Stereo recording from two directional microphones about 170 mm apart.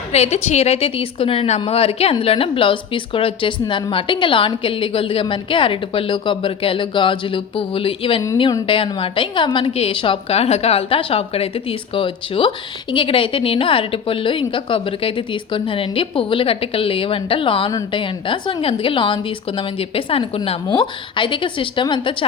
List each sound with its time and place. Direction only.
0.1 s a woman's voice: 40° left (ahead or behind)